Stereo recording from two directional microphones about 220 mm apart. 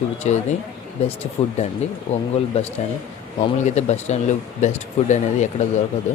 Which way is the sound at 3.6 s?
30° left (ahead or behind).